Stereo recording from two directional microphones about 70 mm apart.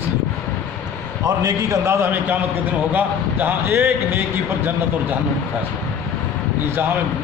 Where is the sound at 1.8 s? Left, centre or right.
Right.